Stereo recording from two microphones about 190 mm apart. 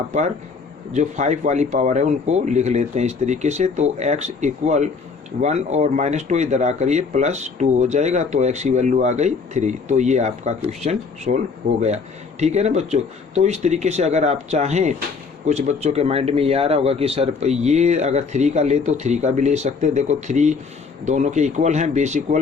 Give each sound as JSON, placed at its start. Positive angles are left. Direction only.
{"t": 0.9, "sound": "speech", "side_deg": -40}
{"t": 12.4, "sound": "speech", "side_deg": -35}